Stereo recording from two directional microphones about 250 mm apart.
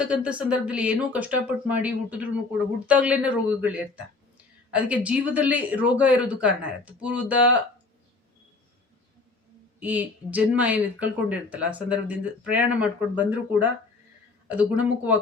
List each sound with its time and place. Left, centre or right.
0.0 s speech: centre
9.8 s speech: centre